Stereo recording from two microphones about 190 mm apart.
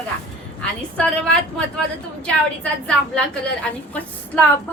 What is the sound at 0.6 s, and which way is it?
A woman's voice, 5° left (ahead or behind).